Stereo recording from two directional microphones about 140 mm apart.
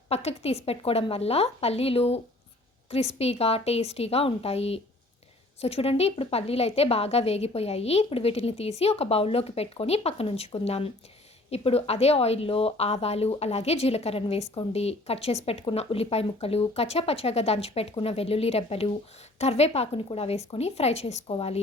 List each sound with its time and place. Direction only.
0.1 s a woman's voice: 50° left (ahead or behind)